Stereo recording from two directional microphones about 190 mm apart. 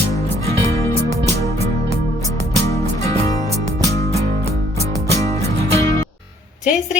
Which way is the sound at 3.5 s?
15° left (ahead or behind).